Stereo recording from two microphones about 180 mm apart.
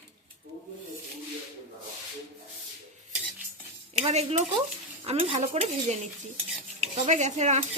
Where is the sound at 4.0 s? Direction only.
35° right (ahead or behind).